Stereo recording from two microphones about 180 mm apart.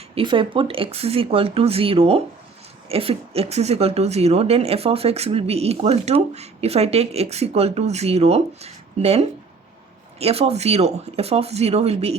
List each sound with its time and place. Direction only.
0.1 s speech: 30° right (ahead or behind)